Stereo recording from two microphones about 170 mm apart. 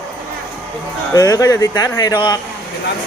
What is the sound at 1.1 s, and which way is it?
Speech, 20° left (ahead or behind).